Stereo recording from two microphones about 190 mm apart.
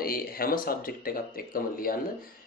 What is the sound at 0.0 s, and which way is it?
Speech, 50° left (ahead or behind).